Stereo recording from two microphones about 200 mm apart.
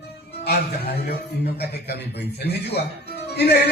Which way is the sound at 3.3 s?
55° left (ahead or behind).